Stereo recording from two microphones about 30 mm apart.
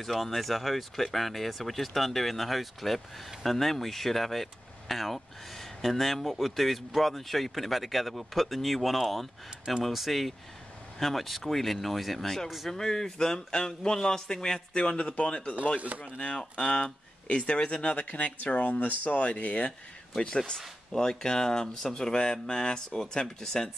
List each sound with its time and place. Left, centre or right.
0.0 s speech: centre
12.7 s speech: centre
14.7 s speech: left
15.9 s speech: right
16.5 s speech: left
17.9 s speech: left
20.2 s speech: left